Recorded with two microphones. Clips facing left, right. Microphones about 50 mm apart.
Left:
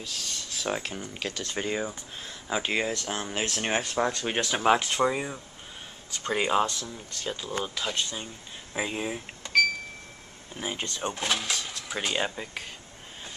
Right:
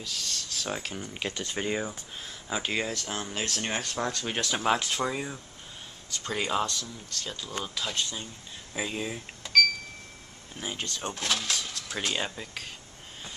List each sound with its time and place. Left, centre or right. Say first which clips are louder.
0.0 s speech: even; centre
0.3 s speech: left 4 dB; centre
1.1 s speech: right 2 dB; centre
1.5 s speech: left 1 dB; centre
3.2 s speech: left 2 dB; centre